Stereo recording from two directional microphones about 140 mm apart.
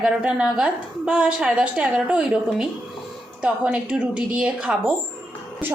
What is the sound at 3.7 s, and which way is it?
A woman's voice, 5° right (ahead or behind).